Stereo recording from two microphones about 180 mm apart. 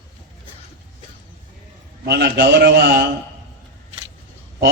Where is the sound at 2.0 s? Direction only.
65° right (ahead or behind).